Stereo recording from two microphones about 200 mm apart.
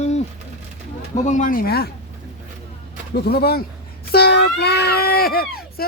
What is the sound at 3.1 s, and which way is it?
Speech, 50° left (ahead or behind).